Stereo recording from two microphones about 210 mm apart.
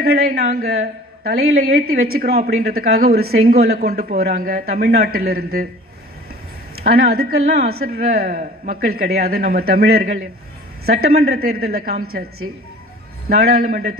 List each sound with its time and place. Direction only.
0.0 s speech: 50° right (ahead or behind)
6.8 s speech: 45° right (ahead or behind)
13.4 s speech: 45° right (ahead or behind)